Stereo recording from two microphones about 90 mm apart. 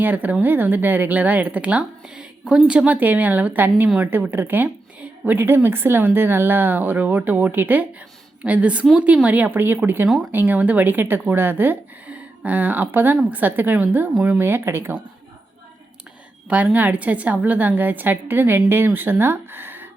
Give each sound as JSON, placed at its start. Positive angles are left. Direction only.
{"t": 0.0, "sound": "a woman's voice", "side_deg": -20}
{"t": 16.7, "sound": "a woman's voice", "side_deg": -15}